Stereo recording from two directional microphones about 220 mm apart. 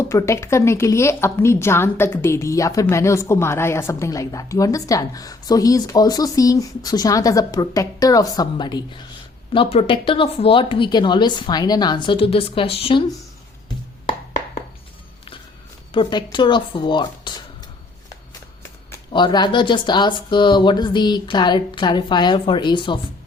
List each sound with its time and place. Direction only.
0.0 s a woman's voice: 10° left (ahead or behind)
15.9 s speech: 20° left (ahead or behind)
18.9 s speech: 20° left (ahead or behind)